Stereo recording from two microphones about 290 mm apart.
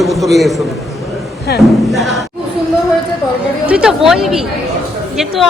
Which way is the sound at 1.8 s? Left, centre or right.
Centre.